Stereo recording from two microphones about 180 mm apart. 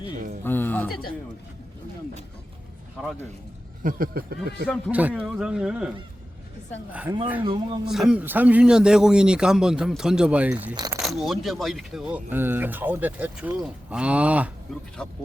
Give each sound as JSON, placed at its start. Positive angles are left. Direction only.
{"t": 0.4, "sound": "speech", "side_deg": 10}
{"t": 3.8, "sound": "a sound", "side_deg": -55}
{"t": 4.9, "sound": "speech", "side_deg": -10}
{"t": 7.4, "sound": "speech", "side_deg": -25}
{"t": 7.9, "sound": "speech", "side_deg": -5}
{"t": 10.8, "sound": "speech", "side_deg": -20}
{"t": 11.0, "sound": "speech", "side_deg": 0}